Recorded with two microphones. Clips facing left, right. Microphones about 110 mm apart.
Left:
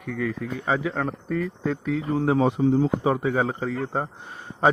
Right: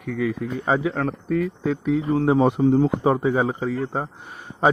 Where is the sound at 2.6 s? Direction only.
40° right (ahead or behind).